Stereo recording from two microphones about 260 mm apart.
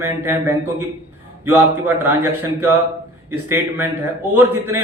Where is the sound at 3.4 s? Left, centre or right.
Centre.